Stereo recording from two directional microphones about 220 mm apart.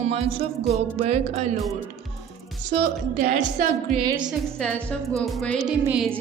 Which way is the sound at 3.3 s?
35° right (ahead or behind).